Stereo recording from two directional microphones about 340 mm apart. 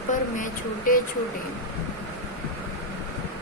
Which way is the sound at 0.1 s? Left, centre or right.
Left.